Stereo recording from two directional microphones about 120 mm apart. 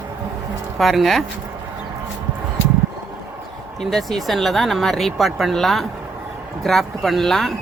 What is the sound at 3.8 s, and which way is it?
Speech, 5° left (ahead or behind).